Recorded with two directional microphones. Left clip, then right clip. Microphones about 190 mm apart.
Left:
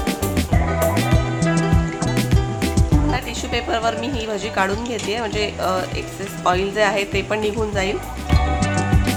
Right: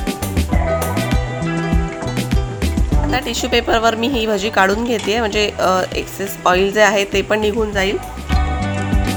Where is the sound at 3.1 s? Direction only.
40° right (ahead or behind).